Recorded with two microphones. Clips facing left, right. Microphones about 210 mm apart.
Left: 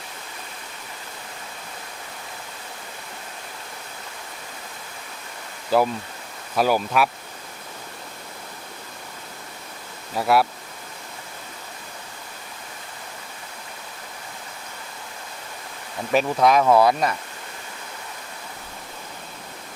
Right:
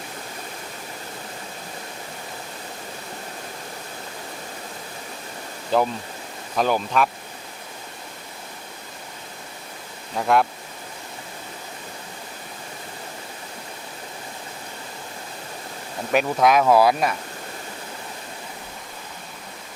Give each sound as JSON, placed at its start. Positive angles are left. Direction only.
{"t": 5.7, "sound": "speech", "side_deg": 5}
{"t": 10.2, "sound": "speech", "side_deg": 5}
{"t": 16.1, "sound": "speech", "side_deg": 0}